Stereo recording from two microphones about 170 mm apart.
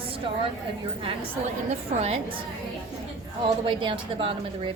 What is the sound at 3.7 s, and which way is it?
A woman's voice, 30° right (ahead or behind).